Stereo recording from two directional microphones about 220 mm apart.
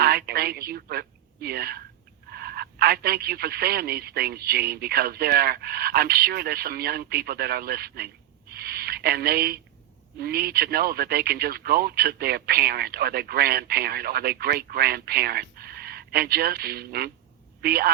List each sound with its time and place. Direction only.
0.0 s a woman's voice: 45° right (ahead or behind)